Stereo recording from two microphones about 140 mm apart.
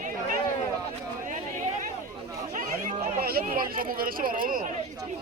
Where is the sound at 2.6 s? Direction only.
90° right.